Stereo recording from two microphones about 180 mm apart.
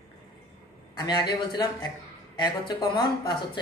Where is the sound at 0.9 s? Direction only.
25° left (ahead or behind).